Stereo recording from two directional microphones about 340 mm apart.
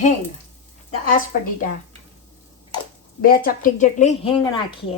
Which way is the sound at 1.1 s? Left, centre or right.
Left.